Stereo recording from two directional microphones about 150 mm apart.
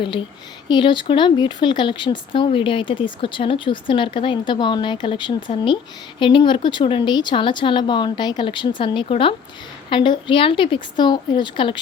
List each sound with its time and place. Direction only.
0.7 s speech: 30° left (ahead or behind)